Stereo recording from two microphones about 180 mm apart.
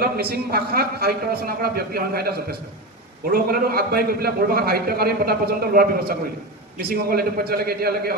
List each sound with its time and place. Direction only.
0.0 s a man's voice: 60° right (ahead or behind)